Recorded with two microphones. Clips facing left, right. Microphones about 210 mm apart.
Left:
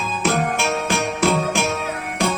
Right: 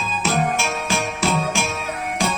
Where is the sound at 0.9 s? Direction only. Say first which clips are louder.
Left 3 dB; 55° left (ahead or behind).